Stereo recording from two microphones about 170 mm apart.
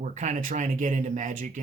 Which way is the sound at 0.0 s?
45° right (ahead or behind).